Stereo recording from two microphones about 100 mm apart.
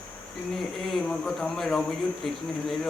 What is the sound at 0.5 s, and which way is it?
Speech, centre (ahead or behind).